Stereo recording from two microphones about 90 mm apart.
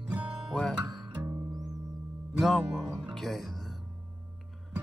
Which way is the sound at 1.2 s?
40° right (ahead or behind).